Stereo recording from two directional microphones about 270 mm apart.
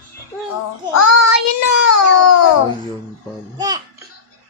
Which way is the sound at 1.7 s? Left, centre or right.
Left.